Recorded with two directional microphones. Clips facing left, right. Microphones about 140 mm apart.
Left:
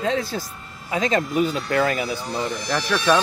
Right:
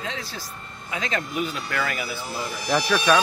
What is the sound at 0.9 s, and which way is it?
Speech, 35° left (ahead or behind).